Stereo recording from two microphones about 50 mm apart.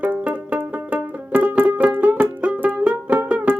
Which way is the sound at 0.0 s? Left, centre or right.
Right.